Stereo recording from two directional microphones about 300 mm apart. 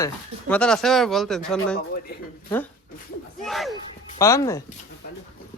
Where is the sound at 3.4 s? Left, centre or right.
Centre.